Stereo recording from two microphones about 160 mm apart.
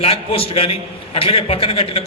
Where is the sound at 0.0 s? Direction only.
35° left (ahead or behind).